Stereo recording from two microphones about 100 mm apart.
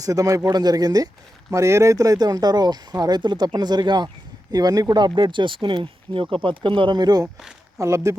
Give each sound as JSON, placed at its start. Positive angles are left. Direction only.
{"t": 0.0, "sound": "speech", "side_deg": -35}
{"t": 7.8, "sound": "speech", "side_deg": -30}